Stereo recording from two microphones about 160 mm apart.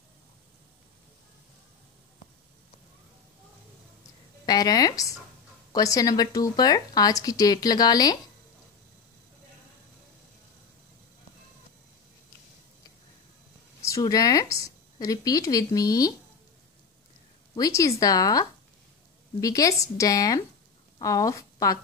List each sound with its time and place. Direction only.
4.5 s speech: 25° left (ahead or behind)
13.8 s a woman's voice: 20° left (ahead or behind)
17.6 s a woman's voice: 20° left (ahead or behind)